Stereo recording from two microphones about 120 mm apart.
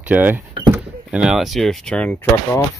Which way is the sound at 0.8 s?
5° right (ahead or behind).